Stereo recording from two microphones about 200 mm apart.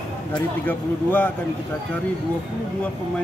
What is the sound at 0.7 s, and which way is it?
Speech, 10° left (ahead or behind).